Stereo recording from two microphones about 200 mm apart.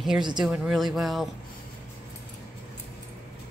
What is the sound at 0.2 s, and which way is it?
Speech, 20° right (ahead or behind).